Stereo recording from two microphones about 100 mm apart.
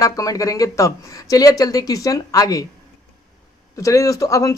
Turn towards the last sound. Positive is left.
turn(degrees=35)  # may be behind; listen again after turning